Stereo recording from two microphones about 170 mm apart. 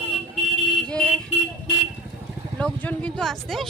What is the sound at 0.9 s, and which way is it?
Speech, 5° left (ahead or behind).